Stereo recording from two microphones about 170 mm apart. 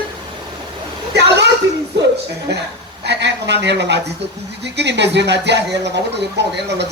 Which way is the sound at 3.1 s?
90° right.